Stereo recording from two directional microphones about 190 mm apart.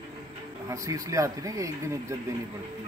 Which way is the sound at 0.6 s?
15° right (ahead or behind).